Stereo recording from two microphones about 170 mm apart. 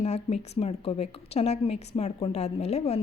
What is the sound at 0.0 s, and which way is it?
A woman's voice, 40° left (ahead or behind).